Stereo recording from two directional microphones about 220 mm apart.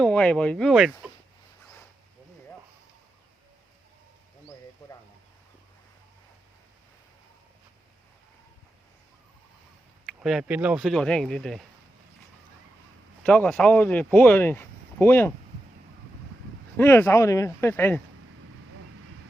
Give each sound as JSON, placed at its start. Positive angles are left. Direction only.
{"t": 0.0, "sound": "speech", "side_deg": 5}
{"t": 10.1, "sound": "speech", "side_deg": 0}
{"t": 13.2, "sound": "speech", "side_deg": 5}
{"t": 16.7, "sound": "speech", "side_deg": 10}